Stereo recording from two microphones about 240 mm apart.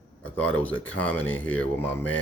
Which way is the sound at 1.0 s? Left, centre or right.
Centre.